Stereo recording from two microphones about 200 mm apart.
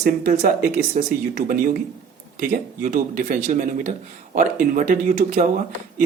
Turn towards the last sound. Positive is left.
turn(degrees=-40)  # may be behind; listen again after turning